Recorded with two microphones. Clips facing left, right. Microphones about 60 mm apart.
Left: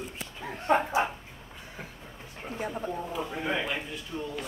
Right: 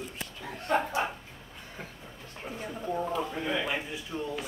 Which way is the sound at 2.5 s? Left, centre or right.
Left.